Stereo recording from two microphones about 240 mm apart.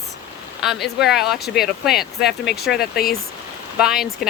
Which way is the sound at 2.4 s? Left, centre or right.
Left.